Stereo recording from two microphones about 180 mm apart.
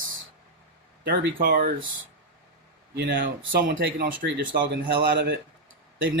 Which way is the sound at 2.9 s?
60° right (ahead or behind).